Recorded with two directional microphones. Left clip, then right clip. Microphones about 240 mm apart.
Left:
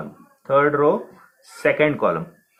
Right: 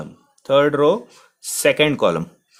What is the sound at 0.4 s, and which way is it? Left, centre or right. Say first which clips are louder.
Speech: right 2 dB; right.